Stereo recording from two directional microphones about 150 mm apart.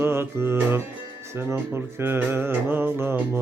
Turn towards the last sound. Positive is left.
turn(degrees=-15)  # may be behind; listen again after turning